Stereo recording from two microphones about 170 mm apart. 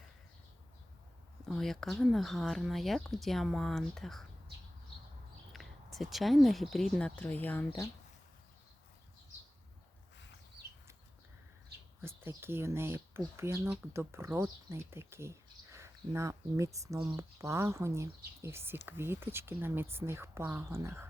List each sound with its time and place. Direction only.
1.5 s speech: centre (ahead or behind)
5.5 s speech: centre (ahead or behind)
12.0 s speech: 15° right (ahead or behind)